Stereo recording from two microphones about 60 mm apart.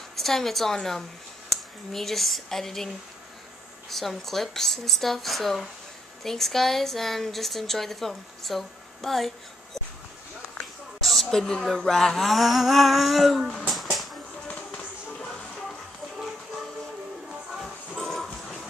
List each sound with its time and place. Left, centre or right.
0.1 s a woman's voice: centre
3.9 s speech: centre
10.6 s speech: centre
13.7 s music: centre
14.5 s tap: centre
17.5 s music: centre